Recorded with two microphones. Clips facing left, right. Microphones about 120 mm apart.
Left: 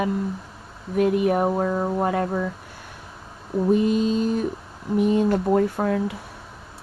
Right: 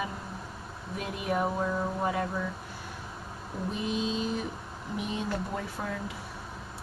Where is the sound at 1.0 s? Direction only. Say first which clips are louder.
Left 11 dB; 55° left (ahead or behind).